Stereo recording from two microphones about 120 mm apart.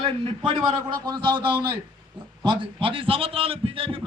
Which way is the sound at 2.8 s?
45° right (ahead or behind).